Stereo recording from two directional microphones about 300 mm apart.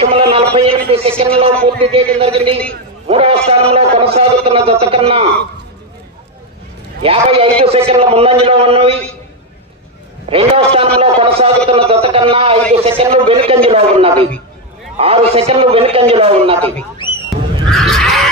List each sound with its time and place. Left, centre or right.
0.3 s a man's voice: centre
7.0 s a man's voice: centre
10.3 s a man's voice: centre
17.7 s neigh: centre